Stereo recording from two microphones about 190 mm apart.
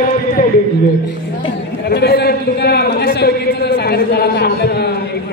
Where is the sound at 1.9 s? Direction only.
55° left (ahead or behind).